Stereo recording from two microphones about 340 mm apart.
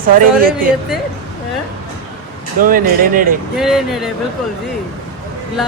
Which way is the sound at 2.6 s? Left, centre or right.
Right.